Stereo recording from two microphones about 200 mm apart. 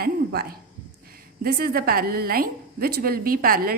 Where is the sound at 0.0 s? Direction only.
50° right (ahead or behind).